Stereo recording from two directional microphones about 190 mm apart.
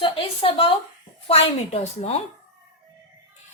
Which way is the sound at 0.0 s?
30° left (ahead or behind).